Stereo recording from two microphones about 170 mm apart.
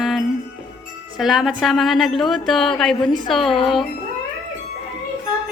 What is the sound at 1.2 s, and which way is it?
A woman's voice, centre (ahead or behind).